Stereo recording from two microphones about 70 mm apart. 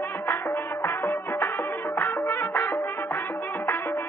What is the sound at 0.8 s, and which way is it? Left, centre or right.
Music, left.